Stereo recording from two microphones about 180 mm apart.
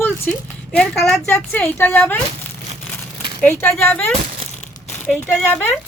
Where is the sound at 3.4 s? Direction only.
10° left (ahead or behind).